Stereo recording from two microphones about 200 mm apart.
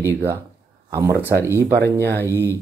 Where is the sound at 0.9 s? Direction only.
15° right (ahead or behind).